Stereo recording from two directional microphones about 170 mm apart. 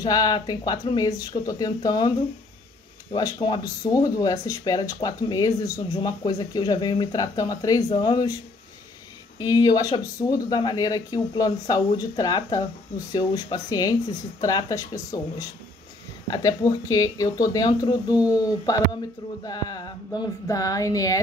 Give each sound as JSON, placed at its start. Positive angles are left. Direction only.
{"t": 0.0, "sound": "speech", "side_deg": 25}
{"t": 9.4, "sound": "speech", "side_deg": 20}